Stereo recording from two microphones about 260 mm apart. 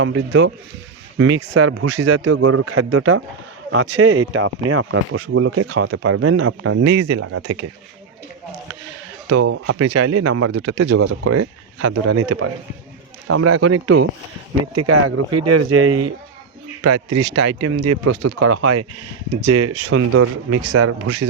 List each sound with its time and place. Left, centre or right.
0.0 s speech: right
9.3 s speech: right
13.2 s speech: right
17.6 s speech: right